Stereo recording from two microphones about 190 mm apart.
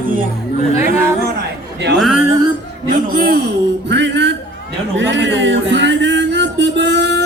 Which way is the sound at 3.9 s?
65° right (ahead or behind).